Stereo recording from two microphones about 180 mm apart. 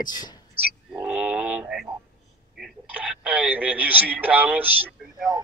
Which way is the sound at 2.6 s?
5° right (ahead or behind).